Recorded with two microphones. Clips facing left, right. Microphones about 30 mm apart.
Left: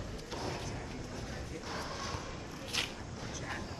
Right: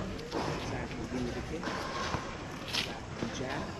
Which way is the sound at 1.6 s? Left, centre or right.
Right.